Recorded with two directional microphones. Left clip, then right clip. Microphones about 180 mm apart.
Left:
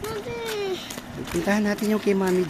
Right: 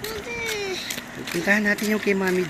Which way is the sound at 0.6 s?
45° left (ahead or behind).